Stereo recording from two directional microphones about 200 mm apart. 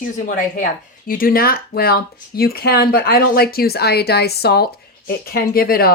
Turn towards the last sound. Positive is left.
turn(degrees=50)  # may be behind; listen again after turning